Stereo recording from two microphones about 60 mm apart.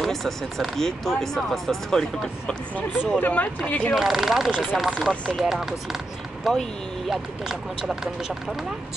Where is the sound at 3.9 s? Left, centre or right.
Centre.